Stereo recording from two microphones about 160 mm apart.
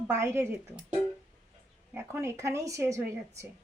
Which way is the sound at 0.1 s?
15° right (ahead or behind).